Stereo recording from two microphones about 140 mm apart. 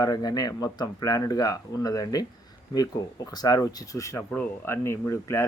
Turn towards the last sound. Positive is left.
turn(degrees=20)  # may be behind; listen again after turning